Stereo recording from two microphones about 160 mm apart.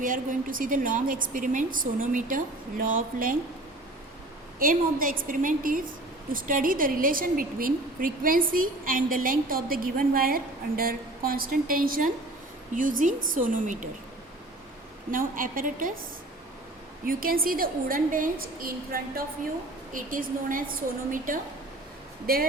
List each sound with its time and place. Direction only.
0.0 s a woman's voice: 60° right (ahead or behind)
4.6 s a woman's voice: 60° right (ahead or behind)
15.1 s a woman's voice: 60° right (ahead or behind)
17.1 s a woman's voice: 65° right (ahead or behind)
19.9 s a woman's voice: 55° right (ahead or behind)